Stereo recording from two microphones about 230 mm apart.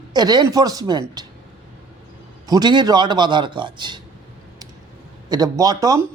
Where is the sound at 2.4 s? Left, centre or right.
Centre.